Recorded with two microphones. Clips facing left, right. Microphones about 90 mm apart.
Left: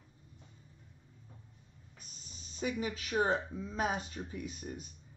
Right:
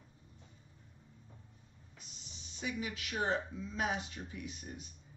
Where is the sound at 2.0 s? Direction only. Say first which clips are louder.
Even; 45° left (ahead or behind).